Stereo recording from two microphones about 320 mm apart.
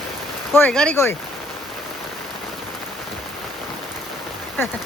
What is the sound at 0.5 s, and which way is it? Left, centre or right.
Speech, centre.